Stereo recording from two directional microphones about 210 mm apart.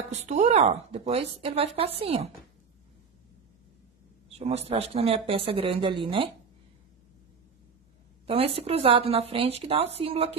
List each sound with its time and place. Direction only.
0.1 s a woman's voice: 30° right (ahead or behind)
4.4 s a woman's voice: 30° right (ahead or behind)
8.3 s a woman's voice: 30° right (ahead or behind)